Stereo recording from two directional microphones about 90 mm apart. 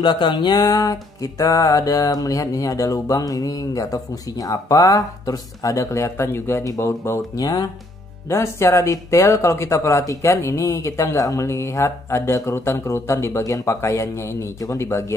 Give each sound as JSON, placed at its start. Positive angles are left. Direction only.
{"t": 0.0, "sound": "a sound", "side_deg": 60}
{"t": 0.7, "sound": "speech", "side_deg": 40}
{"t": 8.3, "sound": "speech", "side_deg": 30}